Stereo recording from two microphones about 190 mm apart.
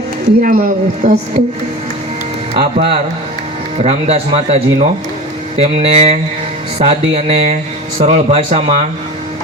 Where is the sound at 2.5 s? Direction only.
40° right (ahead or behind).